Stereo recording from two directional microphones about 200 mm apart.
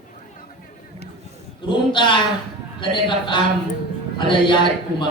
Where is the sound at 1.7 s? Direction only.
25° left (ahead or behind).